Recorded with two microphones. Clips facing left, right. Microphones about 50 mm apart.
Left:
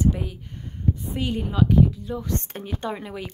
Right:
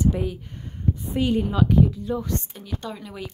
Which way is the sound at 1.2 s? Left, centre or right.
Centre.